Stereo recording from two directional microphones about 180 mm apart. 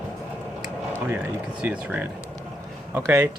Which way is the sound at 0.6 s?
10° right (ahead or behind).